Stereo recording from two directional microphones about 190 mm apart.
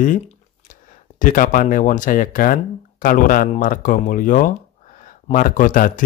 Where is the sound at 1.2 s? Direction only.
45° left (ahead or behind).